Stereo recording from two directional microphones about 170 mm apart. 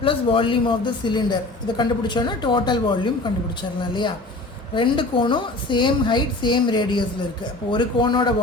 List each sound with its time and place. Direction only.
0.0 s speech: 30° left (ahead or behind)